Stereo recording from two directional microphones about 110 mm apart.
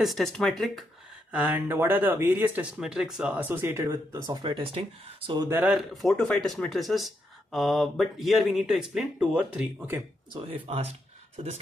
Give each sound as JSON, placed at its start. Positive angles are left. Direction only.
{"t": 0.0, "sound": "speech", "side_deg": 0}
{"t": 1.3, "sound": "speech", "side_deg": -15}
{"t": 2.8, "sound": "speech", "side_deg": -5}
{"t": 4.4, "sound": "speech", "side_deg": -50}
{"t": 5.5, "sound": "speech", "side_deg": -20}
{"t": 5.8, "sound": "speech", "side_deg": 0}
{"t": 10.3, "sound": "speech", "side_deg": -55}